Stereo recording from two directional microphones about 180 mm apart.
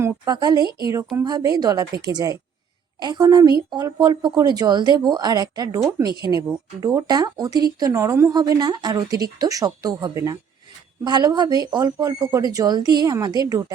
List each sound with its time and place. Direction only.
0.0 s speech: 20° right (ahead or behind)